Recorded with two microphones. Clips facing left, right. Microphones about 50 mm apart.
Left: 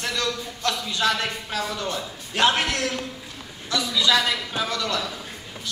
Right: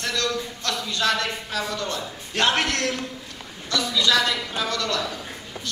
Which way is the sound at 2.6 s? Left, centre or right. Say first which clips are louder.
Right 1 dB; centre.